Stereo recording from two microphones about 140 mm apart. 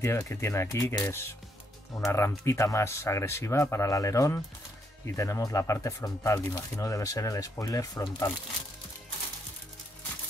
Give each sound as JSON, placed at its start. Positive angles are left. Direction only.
{"t": 0.0, "sound": "speech", "side_deg": 20}